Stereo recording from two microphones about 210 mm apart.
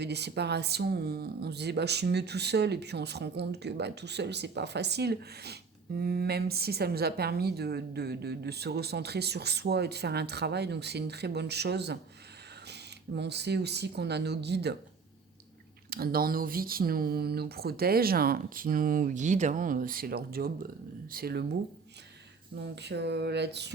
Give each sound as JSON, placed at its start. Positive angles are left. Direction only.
{"t": 0.0, "sound": "a woman's voice", "side_deg": -50}
{"t": 15.9, "sound": "a woman's voice", "side_deg": -45}
{"t": 22.7, "sound": "a woman's voice", "side_deg": -55}